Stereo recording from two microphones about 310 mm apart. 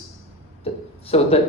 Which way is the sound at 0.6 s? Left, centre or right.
Centre.